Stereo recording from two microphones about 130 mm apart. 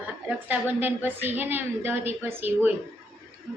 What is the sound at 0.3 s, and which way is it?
Speech, 15° right (ahead or behind).